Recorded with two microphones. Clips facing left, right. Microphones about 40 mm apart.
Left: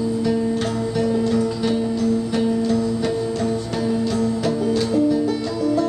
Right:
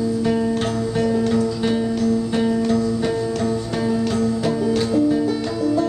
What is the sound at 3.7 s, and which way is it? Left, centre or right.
Music, centre.